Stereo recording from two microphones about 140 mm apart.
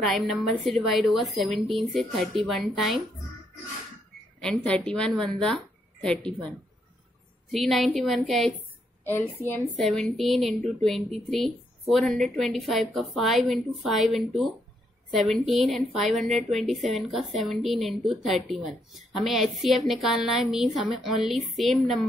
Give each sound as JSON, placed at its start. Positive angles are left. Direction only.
{"t": 0.0, "sound": "a woman's voice", "side_deg": 0}
{"t": 4.4, "sound": "a woman's voice", "side_deg": 5}
{"t": 7.5, "sound": "a woman's voice", "side_deg": 0}
{"t": 9.0, "sound": "a woman's voice", "side_deg": 15}
{"t": 9.8, "sound": "a woman's voice", "side_deg": 0}